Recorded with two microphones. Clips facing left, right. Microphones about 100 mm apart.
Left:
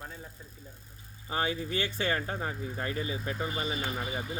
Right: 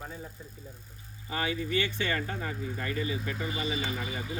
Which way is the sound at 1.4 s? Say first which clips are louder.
Right 1 dB; 35° left (ahead or behind).